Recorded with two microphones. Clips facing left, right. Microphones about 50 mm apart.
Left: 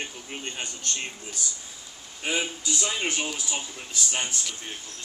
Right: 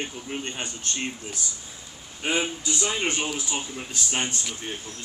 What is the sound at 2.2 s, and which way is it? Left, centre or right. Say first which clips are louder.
Speech: right 3 dB; centre.